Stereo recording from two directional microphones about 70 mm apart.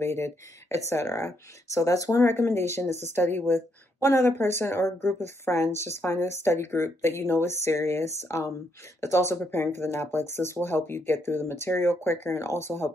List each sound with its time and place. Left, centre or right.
0.0 s speech: left
2.2 s speech: left